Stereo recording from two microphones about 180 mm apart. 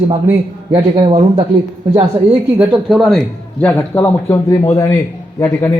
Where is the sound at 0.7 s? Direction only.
30° right (ahead or behind).